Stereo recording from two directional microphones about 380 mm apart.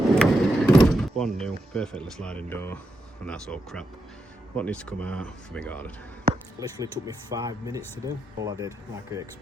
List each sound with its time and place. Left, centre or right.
0.2 s mechanisms: centre
3.2 s speech: centre
6.3 s a sound: right
6.6 s speech: centre